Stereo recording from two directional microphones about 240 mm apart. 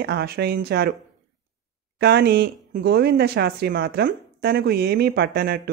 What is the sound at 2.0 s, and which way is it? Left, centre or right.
A woman's voice, right.